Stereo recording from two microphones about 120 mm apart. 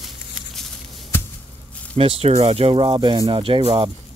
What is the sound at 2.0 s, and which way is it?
Speech, 55° right (ahead or behind).